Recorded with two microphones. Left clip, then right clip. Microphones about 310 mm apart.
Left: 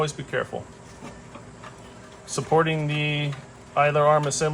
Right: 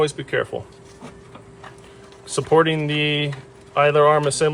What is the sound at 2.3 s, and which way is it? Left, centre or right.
Speech, right.